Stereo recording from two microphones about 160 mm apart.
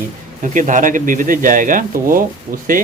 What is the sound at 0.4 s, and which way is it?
A man's voice, 50° right (ahead or behind).